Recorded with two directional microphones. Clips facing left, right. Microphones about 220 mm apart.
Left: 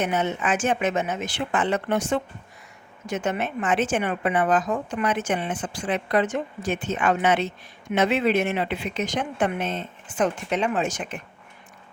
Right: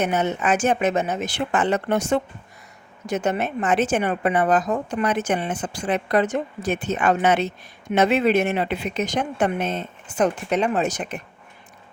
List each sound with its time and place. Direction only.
0.0 s a woman's voice: 40° right (ahead or behind)